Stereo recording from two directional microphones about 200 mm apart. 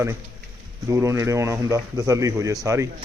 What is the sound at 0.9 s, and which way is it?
A man's voice, 15° right (ahead or behind).